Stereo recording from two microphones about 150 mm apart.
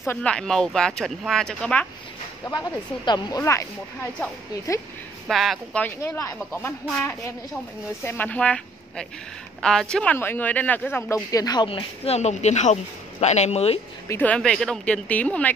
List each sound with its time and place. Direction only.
0.0 s speech: 10° left (ahead or behind)
2.5 s speech: 25° left (ahead or behind)
5.3 s speech: centre (ahead or behind)
5.9 s speech: 20° left (ahead or behind)
6.9 s speech: 5° left (ahead or behind); by 13.7 s 45° left (ahead or behind)
14.0 s speech: 15° left (ahead or behind)